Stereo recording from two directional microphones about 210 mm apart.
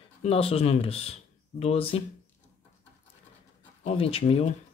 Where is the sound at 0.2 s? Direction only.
30° left (ahead or behind).